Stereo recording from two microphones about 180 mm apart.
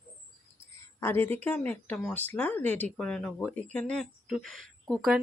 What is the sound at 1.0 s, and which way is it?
Speech, 10° left (ahead or behind).